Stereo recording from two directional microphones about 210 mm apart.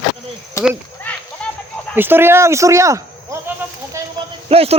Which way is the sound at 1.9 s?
10° right (ahead or behind).